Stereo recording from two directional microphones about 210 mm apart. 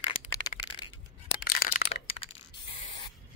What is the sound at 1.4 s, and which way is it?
Crack, 45° left (ahead or behind).